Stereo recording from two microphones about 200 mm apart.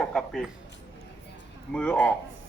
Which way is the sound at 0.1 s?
5° left (ahead or behind).